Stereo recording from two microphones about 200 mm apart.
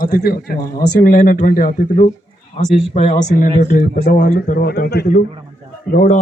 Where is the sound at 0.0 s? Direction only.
45° left (ahead or behind).